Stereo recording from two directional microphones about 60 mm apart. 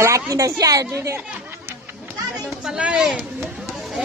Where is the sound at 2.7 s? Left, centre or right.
Centre.